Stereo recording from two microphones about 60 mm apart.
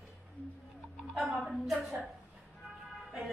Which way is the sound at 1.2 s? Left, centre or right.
Centre.